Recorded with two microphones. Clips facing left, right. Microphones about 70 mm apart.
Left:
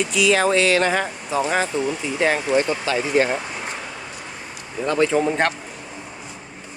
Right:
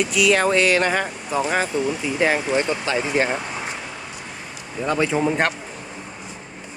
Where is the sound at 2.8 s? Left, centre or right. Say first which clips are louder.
Left 2 dB; right.